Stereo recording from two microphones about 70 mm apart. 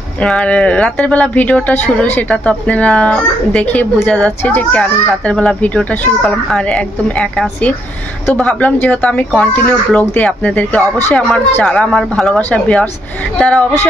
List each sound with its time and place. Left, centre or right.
0.2 s a child's voice: centre